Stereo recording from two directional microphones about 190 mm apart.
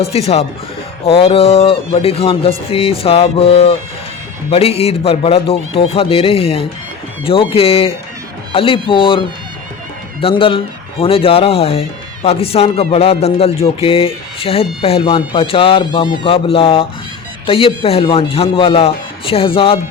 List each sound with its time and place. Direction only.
0.0 s a man's voice: 35° left (ahead or behind)